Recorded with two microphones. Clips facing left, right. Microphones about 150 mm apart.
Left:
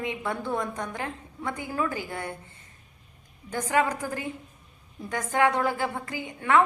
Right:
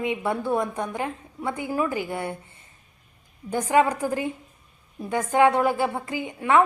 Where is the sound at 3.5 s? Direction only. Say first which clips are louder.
Right 5 dB; 15° right (ahead or behind).